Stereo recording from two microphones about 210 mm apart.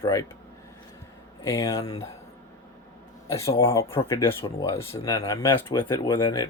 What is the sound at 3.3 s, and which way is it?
Speech, 15° left (ahead or behind).